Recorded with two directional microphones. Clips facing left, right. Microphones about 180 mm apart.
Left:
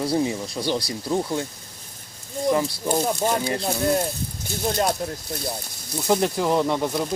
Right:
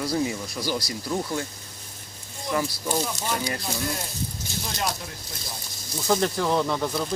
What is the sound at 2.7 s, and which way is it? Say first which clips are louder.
Speech: left 5 dB; 55° left (ahead or behind).